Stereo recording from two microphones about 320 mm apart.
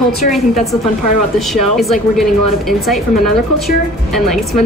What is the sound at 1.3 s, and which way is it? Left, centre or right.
A woman's voice, centre.